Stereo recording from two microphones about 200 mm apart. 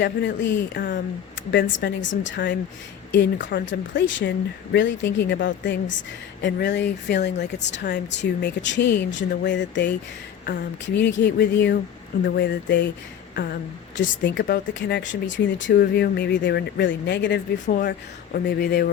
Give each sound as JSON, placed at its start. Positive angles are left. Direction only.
{"t": 0.0, "sound": "speech", "side_deg": 60}
{"t": 10.4, "sound": "speech", "side_deg": 45}
{"t": 10.8, "sound": "speech", "side_deg": 65}
{"t": 15.8, "sound": "speech", "side_deg": 50}
{"t": 18.3, "sound": "speech", "side_deg": 50}